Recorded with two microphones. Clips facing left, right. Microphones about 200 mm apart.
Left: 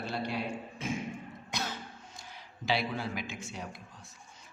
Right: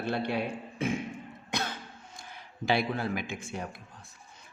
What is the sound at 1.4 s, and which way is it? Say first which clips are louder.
Cough: right 4 dB; 60° right (ahead or behind).